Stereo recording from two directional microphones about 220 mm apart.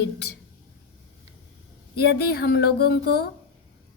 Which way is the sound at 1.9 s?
45° left (ahead or behind).